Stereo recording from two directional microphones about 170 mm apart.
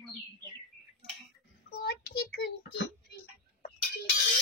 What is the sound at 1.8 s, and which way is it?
Child singing, 75° left (ahead or behind).